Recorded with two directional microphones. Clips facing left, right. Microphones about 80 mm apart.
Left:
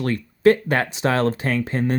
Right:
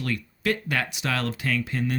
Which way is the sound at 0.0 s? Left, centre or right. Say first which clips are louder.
Left 11 dB; left.